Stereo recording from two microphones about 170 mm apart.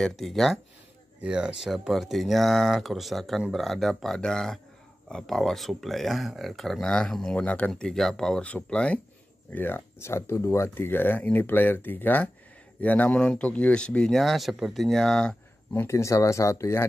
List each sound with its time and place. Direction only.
0.2 s speech: centre (ahead or behind)
15.7 s speech: 15° left (ahead or behind)